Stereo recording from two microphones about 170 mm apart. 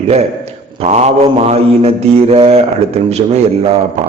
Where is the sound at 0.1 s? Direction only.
40° right (ahead or behind).